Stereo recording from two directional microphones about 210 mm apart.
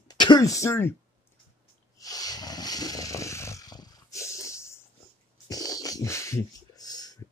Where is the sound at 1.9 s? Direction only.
15° left (ahead or behind).